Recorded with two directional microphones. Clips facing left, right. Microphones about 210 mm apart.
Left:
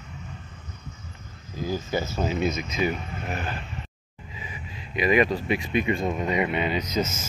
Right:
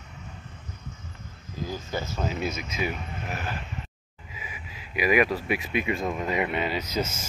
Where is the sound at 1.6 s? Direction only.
5° left (ahead or behind).